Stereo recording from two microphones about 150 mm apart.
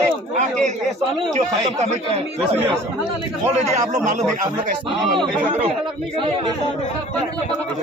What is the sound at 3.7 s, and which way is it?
Speech, 55° right (ahead or behind).